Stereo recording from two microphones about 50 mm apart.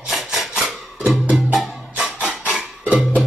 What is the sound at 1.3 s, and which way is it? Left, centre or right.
Music, right.